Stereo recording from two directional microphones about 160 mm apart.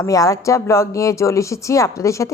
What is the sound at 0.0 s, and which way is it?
Speech, 20° left (ahead or behind).